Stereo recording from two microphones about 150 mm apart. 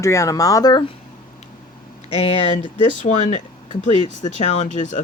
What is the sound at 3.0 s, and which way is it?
Speech, 55° left (ahead or behind).